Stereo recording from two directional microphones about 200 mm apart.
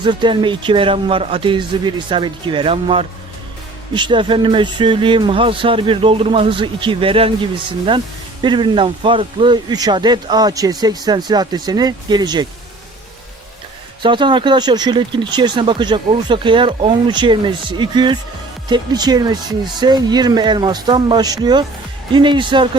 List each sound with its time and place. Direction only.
0.0 s speech: 25° right (ahead or behind)
14.0 s speech: 25° right (ahead or behind)